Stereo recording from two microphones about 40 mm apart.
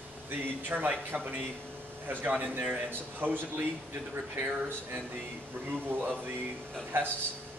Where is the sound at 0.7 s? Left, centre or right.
Right.